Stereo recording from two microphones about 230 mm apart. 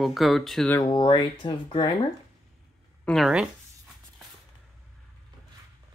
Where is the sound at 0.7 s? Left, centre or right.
Centre.